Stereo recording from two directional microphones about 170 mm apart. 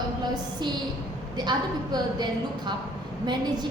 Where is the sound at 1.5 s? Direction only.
25° right (ahead or behind).